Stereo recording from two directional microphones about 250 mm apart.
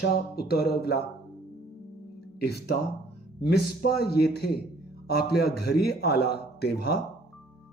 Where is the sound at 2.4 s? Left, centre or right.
Left.